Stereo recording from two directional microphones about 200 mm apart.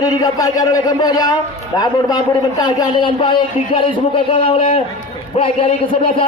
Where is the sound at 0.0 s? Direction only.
15° left (ahead or behind).